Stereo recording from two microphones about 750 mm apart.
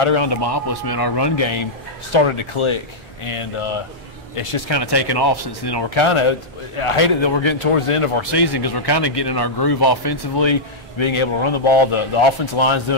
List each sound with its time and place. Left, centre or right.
0.0 s speech: left